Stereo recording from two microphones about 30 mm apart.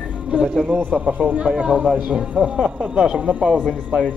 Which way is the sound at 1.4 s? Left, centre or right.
Right.